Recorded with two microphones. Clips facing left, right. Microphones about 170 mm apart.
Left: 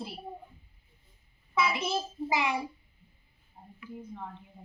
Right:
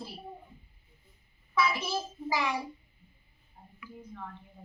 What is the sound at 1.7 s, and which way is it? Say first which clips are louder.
Speech: left 2 dB; 20° left (ahead or behind).